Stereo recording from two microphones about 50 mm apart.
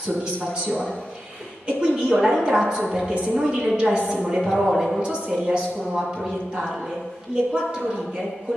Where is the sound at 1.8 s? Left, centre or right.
Centre.